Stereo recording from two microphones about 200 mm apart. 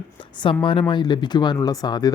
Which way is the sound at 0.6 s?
25° left (ahead or behind).